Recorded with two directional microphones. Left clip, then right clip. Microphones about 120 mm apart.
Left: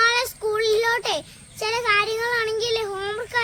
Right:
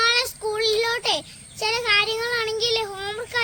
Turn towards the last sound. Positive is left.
turn(degrees=20)  # may be behind; listen again after turning